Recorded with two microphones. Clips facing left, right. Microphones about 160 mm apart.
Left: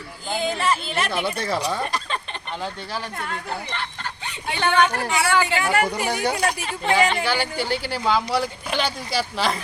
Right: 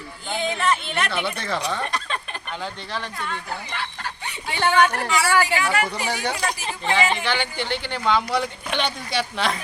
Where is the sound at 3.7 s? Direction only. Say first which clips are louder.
Even; 10° right (ahead or behind).